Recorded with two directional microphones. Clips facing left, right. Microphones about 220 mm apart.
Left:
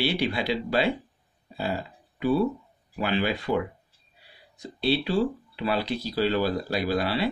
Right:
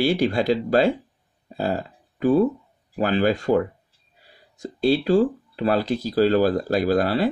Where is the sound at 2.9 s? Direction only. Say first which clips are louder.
Right 6 dB; 45° right (ahead or behind).